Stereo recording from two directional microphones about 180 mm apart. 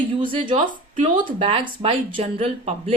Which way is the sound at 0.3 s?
30° right (ahead or behind).